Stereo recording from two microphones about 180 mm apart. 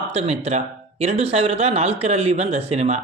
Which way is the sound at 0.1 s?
35° right (ahead or behind).